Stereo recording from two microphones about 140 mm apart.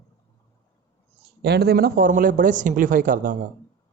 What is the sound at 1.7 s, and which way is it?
Speech, 90° right.